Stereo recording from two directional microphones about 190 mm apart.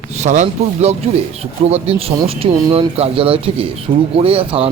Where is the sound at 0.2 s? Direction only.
40° right (ahead or behind).